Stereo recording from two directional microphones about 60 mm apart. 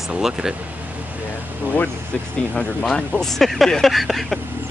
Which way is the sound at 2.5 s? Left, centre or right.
Centre.